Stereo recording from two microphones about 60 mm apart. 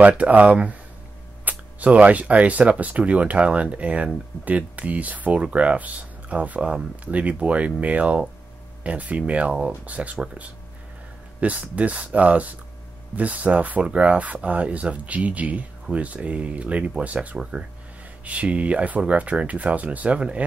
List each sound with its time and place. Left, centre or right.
0.2 s speech: right
11.4 s speech: right